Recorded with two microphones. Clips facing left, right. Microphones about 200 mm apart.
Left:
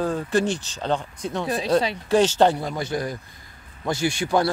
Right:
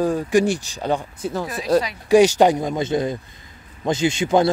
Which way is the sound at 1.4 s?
30° left (ahead or behind).